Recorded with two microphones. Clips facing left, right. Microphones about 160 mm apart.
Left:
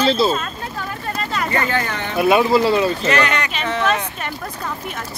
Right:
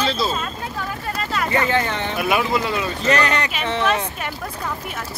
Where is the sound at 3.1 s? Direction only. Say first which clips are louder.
Even; 35° right (ahead or behind).